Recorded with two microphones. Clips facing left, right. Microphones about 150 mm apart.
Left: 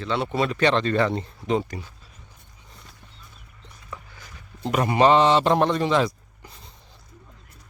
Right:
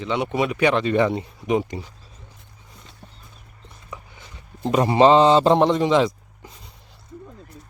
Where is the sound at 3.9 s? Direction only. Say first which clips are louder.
Right 1 dB; 20° right (ahead or behind).